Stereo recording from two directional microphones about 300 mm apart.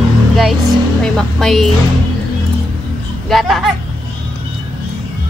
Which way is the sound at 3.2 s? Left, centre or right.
Centre.